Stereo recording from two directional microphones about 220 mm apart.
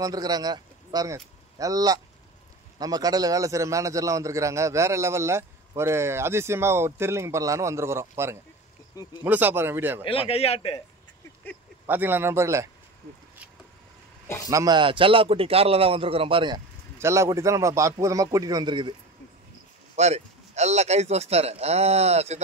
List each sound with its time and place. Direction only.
0.0 s a man's voice: 15° right (ahead or behind)
10.0 s speech: 25° left (ahead or behind)
11.8 s a man's voice: 10° right (ahead or behind)
14.2 s a man's voice: 10° left (ahead or behind)
14.5 s speech: 15° right (ahead or behind)
20.0 s speech: 30° right (ahead or behind)